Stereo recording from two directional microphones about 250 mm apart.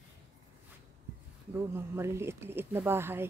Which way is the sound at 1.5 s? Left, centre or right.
Centre.